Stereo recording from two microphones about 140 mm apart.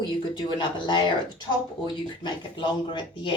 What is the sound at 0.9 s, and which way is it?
Speech, 35° left (ahead or behind).